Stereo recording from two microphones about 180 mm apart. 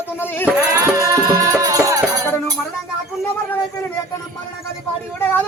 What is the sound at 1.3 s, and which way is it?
Music, 20° right (ahead or behind).